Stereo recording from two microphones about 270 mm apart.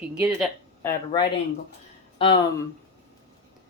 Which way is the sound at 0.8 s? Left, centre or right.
Centre.